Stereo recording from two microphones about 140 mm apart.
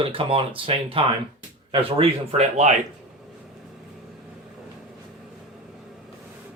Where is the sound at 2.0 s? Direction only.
50° right (ahead or behind).